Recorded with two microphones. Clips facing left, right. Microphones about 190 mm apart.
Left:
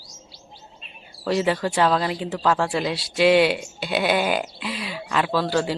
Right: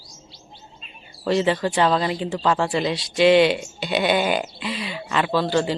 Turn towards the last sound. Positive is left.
turn(degrees=5)  # may be behind; listen again after turning